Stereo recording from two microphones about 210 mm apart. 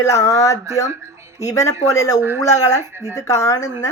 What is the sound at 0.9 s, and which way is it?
Music, 15° right (ahead or behind).